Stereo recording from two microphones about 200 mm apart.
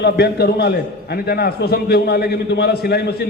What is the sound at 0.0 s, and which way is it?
A man's voice, 55° left (ahead or behind).